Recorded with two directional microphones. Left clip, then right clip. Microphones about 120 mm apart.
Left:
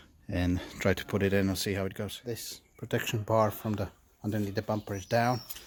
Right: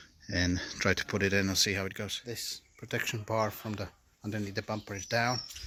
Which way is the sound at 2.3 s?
40° left (ahead or behind).